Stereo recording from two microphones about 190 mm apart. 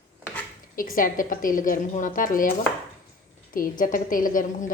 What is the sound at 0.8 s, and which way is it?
Speech, 45° left (ahead or behind).